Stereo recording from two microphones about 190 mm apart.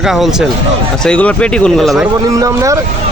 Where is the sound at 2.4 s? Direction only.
15° right (ahead or behind).